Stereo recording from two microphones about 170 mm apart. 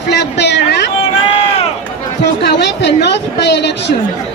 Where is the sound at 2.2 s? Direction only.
85° left.